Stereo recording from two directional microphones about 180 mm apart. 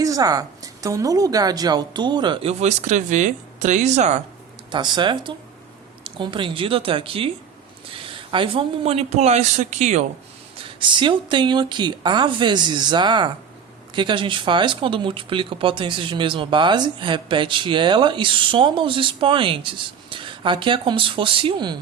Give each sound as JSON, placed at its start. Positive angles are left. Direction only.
{"t": 0.0, "sound": "speech", "side_deg": -20}
{"t": 4.7, "sound": "speech", "side_deg": -25}
{"t": 10.6, "sound": "speech", "side_deg": -25}